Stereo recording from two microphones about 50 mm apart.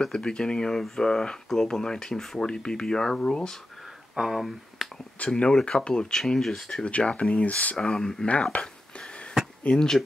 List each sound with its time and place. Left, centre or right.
0.0 s speech: centre
4.1 s speech: centre
5.3 s speech: centre
6.7 s speech: left
7.7 s speech: centre
8.3 s speech: left
9.7 s speech: left